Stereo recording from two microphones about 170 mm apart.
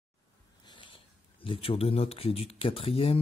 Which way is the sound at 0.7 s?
30° left (ahead or behind).